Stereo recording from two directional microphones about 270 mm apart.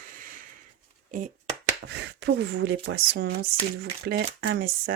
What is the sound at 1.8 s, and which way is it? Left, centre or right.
Speech, right.